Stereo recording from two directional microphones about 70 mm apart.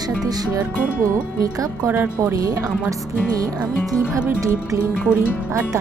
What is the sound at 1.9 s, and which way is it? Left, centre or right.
Speech, right.